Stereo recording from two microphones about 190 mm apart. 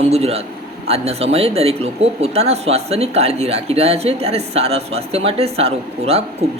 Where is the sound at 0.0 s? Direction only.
35° right (ahead or behind).